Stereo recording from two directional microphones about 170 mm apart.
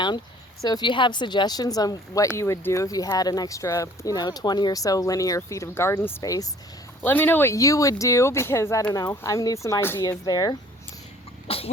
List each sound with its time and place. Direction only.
0.6 s speech: 25° left (ahead or behind)
11.4 s cough: 35° left (ahead or behind)